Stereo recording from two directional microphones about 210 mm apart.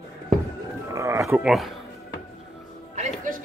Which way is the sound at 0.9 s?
15° right (ahead or behind).